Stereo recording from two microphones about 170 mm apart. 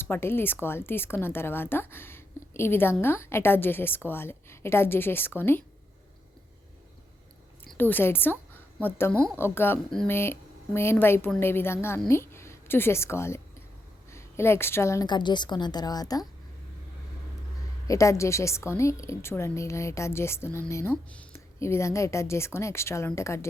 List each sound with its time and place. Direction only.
0.0 s a woman's voice: 15° left (ahead or behind)
7.7 s a woman's voice: 10° left (ahead or behind)
17.8 s a woman's voice: 20° left (ahead or behind)